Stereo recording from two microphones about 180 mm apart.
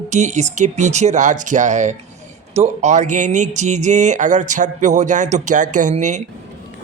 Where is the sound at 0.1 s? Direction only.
40° right (ahead or behind).